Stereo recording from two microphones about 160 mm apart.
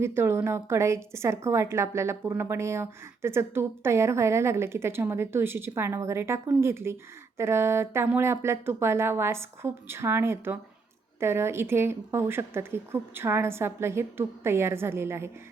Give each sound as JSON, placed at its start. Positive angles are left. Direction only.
{"t": 0.0, "sound": "speech", "side_deg": -15}